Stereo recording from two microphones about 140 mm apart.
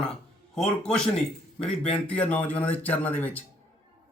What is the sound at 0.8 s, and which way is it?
A man's voice, 5° left (ahead or behind).